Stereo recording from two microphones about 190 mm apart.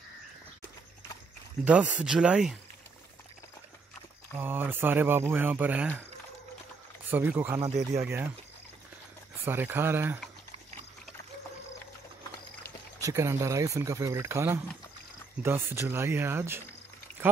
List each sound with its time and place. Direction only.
1.6 s speech: 5° right (ahead or behind)
4.4 s speech: 10° right (ahead or behind)
7.1 s speech: 10° right (ahead or behind)
7.6 s speech: 35° right (ahead or behind)
8.0 s speech: 10° right (ahead or behind)
9.4 s speech: 10° right (ahead or behind)
13.0 s speech: 15° right (ahead or behind)